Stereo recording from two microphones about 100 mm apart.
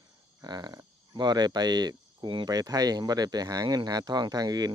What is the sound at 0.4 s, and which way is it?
Speech, 45° right (ahead or behind).